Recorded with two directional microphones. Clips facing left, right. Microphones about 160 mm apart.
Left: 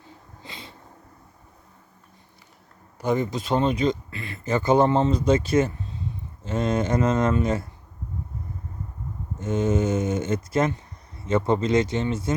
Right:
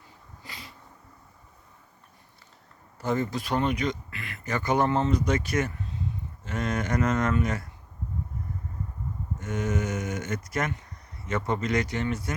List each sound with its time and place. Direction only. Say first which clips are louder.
0.4 s a sound: left 3 dB; 25° left (ahead or behind)
3.0 s speech: left 4 dB; 15° left (ahead or behind)
9.4 s speech: left 7 dB; 25° left (ahead or behind)